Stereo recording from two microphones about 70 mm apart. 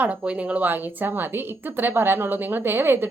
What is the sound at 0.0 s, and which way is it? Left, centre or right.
A woman's voice, centre.